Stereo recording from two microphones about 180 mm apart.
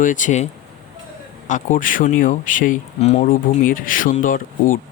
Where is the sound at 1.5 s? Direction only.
45° left (ahead or behind).